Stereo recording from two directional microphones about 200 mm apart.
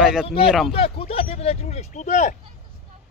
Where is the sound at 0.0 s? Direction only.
5° right (ahead or behind).